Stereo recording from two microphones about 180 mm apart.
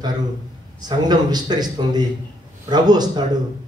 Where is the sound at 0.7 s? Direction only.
25° right (ahead or behind).